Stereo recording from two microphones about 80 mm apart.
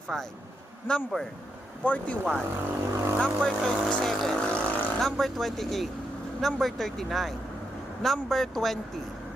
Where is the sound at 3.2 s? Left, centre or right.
Centre.